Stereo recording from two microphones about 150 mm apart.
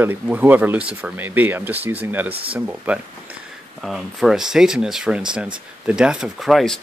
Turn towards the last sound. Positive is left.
turn(degrees=0)  # may be behind; listen again after turning